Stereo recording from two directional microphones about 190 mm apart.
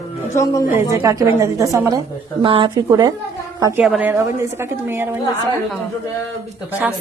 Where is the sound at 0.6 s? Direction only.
20° right (ahead or behind).